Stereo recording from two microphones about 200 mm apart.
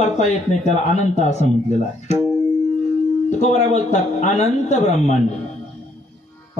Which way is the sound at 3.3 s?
35° left (ahead or behind).